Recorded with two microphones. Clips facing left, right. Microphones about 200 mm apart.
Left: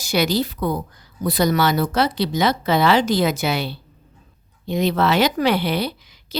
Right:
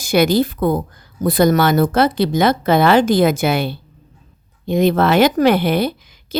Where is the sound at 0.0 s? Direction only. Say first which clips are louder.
Right 6 dB; 55° right (ahead or behind).